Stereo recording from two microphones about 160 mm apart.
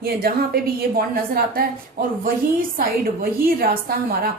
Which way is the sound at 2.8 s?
65° right (ahead or behind).